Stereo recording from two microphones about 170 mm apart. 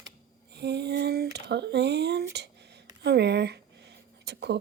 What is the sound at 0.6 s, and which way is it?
A woman's voice, 80° right.